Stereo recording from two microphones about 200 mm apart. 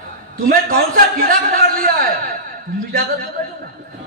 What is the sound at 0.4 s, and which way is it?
A man's voice, 45° right (ahead or behind).